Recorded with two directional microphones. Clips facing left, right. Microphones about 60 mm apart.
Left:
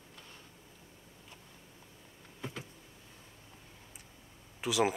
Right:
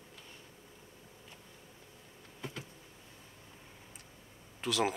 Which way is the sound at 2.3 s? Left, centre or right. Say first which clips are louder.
Left 1 dB; centre.